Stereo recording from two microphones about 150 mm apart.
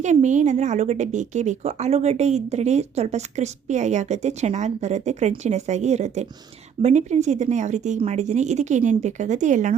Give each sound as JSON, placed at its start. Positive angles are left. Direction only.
{"t": 0.0, "sound": "a woman's voice", "side_deg": -55}